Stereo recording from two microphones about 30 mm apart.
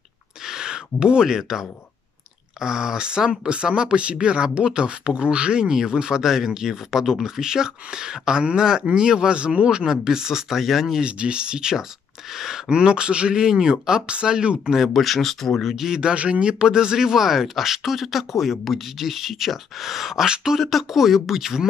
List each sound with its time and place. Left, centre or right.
0.5 s speech: right
2.6 s speech: right
10.0 s speech: centre
10.5 s speech: centre
11.0 s speech: right
12.3 s speech: centre
12.6 s speech: right
14.9 s speech: centre
15.6 s speech: centre
15.9 s speech: right; by 21.5 s centre